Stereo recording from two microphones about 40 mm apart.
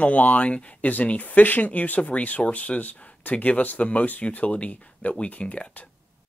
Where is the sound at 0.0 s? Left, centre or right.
Left.